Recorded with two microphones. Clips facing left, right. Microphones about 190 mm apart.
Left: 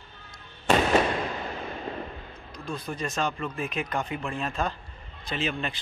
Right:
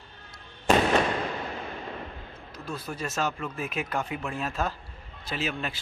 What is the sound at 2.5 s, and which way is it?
A man's voice, 5° right (ahead or behind).